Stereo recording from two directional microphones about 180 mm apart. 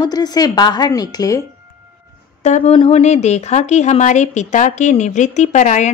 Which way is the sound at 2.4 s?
40° left (ahead or behind).